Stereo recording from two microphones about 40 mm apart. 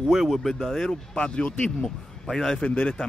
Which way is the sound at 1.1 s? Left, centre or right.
Left.